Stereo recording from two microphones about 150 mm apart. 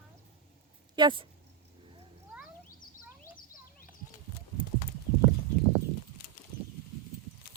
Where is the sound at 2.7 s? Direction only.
65° left (ahead or behind).